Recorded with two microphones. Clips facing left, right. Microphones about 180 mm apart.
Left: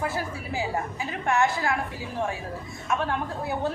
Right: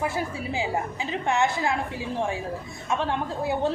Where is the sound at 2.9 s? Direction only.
25° right (ahead or behind).